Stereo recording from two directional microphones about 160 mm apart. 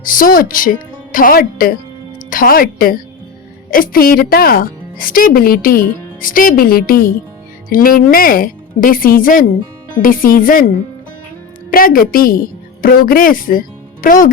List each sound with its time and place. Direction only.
0.0 s speech: 60° left (ahead or behind)
11.7 s a woman's voice: 65° left (ahead or behind)